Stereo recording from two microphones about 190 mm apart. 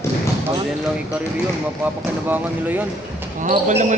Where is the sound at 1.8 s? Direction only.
10° right (ahead or behind).